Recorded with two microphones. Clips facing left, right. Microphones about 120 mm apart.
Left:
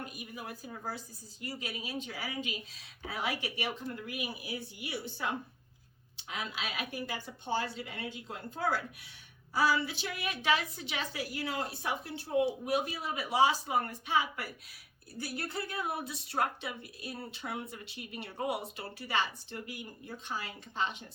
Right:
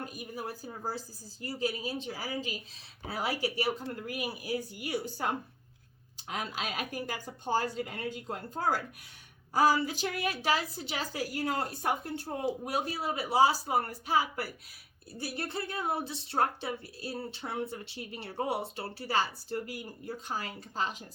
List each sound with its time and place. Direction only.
0.0 s a woman's voice: 40° right (ahead or behind)